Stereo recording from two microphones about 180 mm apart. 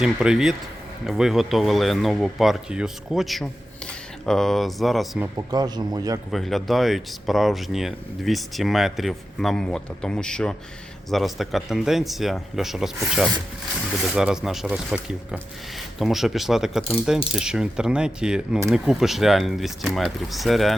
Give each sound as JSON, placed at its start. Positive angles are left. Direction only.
{"t": 0.0, "sound": "speech", "side_deg": -5}
{"t": 5.5, "sound": "a man's voice", "side_deg": -20}
{"t": 6.3, "sound": "speech", "side_deg": 0}